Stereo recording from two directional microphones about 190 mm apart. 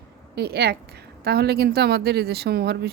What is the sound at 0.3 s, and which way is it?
Speech, 60° right (ahead or behind).